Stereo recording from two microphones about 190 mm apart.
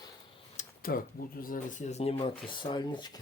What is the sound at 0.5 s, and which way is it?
Speech, 50° left (ahead or behind).